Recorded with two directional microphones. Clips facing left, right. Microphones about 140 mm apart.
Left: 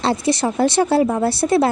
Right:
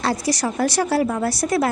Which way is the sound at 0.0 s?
25° left (ahead or behind).